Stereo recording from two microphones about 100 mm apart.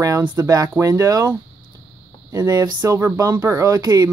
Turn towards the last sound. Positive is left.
turn(degrees=-40)  # may be behind; listen again after turning